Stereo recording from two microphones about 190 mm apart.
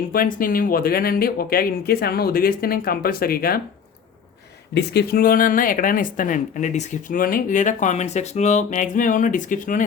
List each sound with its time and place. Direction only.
0.1 s speech: 50° left (ahead or behind)
4.7 s speech: 60° left (ahead or behind); by 9.8 s 45° left (ahead or behind)